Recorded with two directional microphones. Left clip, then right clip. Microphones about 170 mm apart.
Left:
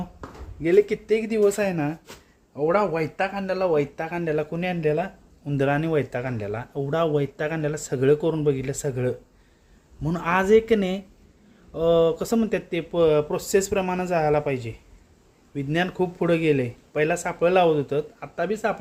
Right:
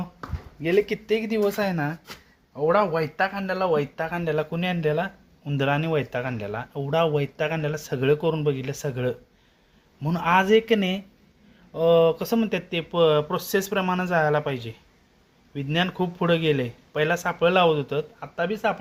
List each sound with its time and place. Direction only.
0.6 s speech: 10° left (ahead or behind)